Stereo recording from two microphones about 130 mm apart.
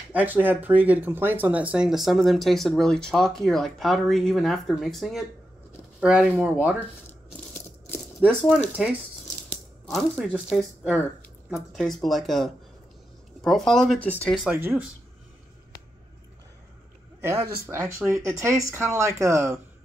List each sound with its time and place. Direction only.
0.1 s speech: 15° right (ahead or behind)
8.2 s speech: 5° left (ahead or behind)
9.5 s a sound: centre (ahead or behind)
10.5 s speech: centre (ahead or behind)
14.4 s speech: 15° right (ahead or behind)
17.2 s speech: 20° right (ahead or behind)